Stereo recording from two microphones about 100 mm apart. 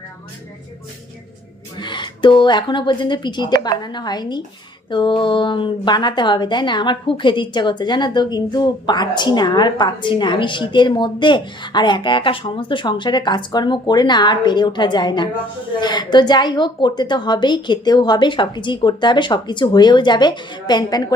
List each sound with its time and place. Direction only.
1.8 s a woman's voice: 50° left (ahead or behind)